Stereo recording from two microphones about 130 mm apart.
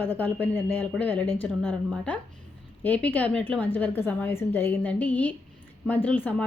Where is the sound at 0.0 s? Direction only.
15° left (ahead or behind).